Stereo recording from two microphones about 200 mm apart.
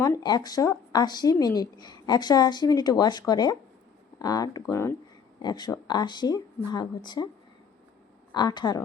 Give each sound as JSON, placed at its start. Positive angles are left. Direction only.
{"t": 0.0, "sound": "speech", "side_deg": 20}
{"t": 8.3, "sound": "speech", "side_deg": 20}